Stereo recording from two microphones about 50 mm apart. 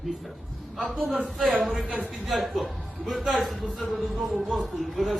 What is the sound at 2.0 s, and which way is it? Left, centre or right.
Speech, right.